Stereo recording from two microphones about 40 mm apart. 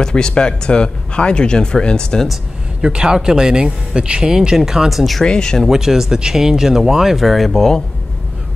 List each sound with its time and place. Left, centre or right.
0.0 s speech: left
2.8 s speech: centre
5.2 s speech: centre
5.7 s speech: centre